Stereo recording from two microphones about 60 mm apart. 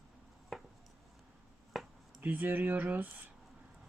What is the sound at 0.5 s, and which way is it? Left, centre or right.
Chopping, centre.